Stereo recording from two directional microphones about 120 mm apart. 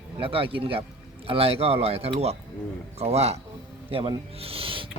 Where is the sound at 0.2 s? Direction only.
50° right (ahead or behind).